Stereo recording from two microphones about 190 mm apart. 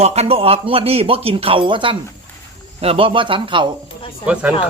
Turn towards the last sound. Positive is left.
turn(degrees=-5)  # may be behind; listen again after turning